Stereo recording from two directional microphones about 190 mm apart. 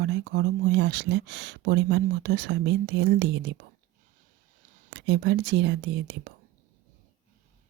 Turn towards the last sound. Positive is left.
turn(degrees=-65)  # may be behind; listen again after turning